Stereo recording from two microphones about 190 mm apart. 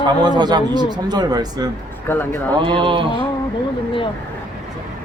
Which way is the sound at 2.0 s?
10° left (ahead or behind).